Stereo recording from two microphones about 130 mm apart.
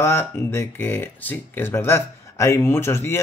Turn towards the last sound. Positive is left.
turn(degrees=20)  # may be behind; listen again after turning